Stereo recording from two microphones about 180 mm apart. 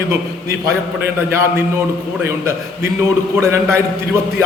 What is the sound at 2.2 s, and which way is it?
A man's voice, 15° right (ahead or behind).